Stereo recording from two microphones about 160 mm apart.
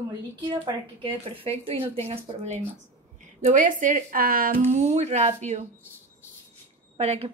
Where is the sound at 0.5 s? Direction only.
30° right (ahead or behind).